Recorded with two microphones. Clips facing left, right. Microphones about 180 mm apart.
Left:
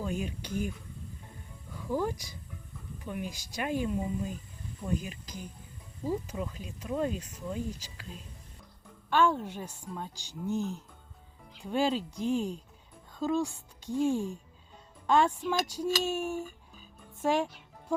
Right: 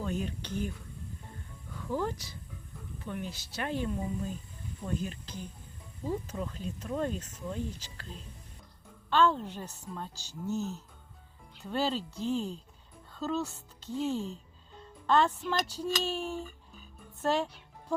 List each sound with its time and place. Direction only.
0.0 s speech: 10° left (ahead or behind)
1.8 s speech: 10° left (ahead or behind)
9.0 s speech: 10° left (ahead or behind)
17.2 s music: 10° left (ahead or behind)